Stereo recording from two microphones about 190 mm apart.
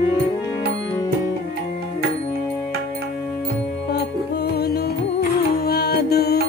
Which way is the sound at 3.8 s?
60° left (ahead or behind).